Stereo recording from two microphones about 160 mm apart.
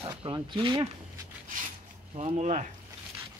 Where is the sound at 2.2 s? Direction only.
45° right (ahead or behind).